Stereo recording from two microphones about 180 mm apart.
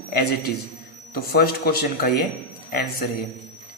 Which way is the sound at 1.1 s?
55° left (ahead or behind).